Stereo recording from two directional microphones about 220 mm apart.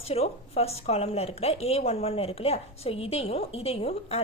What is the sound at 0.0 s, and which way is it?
A woman's voice, 25° left (ahead or behind).